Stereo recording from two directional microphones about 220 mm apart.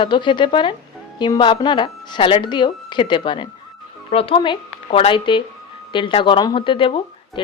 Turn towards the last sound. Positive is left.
turn(degrees=20)  # may be behind; listen again after turning